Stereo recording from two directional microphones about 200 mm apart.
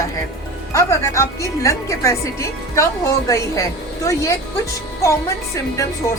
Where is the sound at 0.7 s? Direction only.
15° left (ahead or behind).